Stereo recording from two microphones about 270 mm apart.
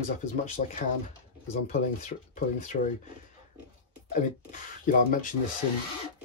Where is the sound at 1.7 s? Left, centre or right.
Left.